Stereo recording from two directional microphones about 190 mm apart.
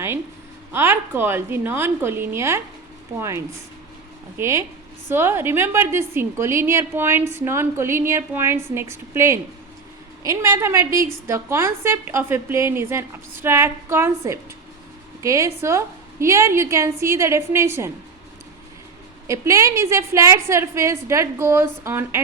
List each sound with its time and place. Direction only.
0.7 s a woman's voice: 10° right (ahead or behind)
19.3 s a woman's voice: 15° right (ahead or behind)